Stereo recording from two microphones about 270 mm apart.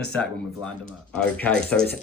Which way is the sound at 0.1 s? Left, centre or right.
Centre.